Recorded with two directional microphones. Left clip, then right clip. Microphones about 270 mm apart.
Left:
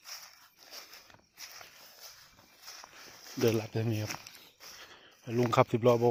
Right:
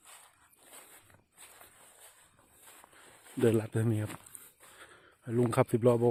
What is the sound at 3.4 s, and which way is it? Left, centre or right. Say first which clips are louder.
Speech: right 1 dB; right.